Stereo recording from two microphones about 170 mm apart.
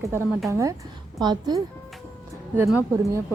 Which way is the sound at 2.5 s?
15° right (ahead or behind).